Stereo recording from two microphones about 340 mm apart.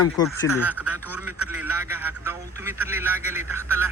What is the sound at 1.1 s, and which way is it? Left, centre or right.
A man's voice, centre.